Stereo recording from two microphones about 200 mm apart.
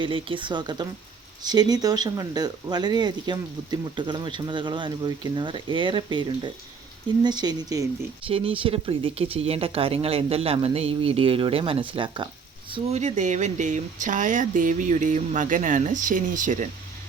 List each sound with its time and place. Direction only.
0.0 s speech: 25° right (ahead or behind)
12.7 s speech: 35° right (ahead or behind)